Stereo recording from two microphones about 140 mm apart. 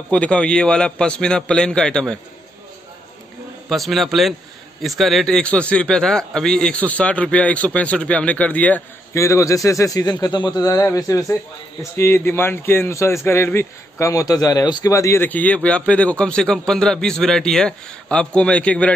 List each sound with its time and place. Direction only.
0.1 s a man's voice: 10° left (ahead or behind)
3.6 s a man's voice: centre (ahead or behind)